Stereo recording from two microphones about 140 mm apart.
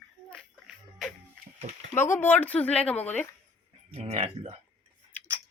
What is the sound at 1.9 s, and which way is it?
Speech, 15° left (ahead or behind).